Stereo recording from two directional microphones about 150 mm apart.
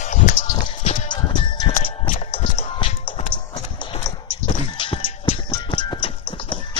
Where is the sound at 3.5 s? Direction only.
30° left (ahead or behind).